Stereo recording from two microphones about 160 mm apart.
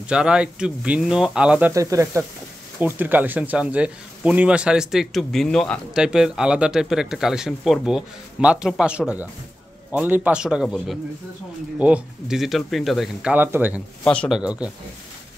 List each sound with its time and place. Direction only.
0.1 s speech: 5° right (ahead or behind)
1.7 s speech: 20° right (ahead or behind)
14.0 s a man's voice: 5° left (ahead or behind)
14.4 s speech: 5° right (ahead or behind)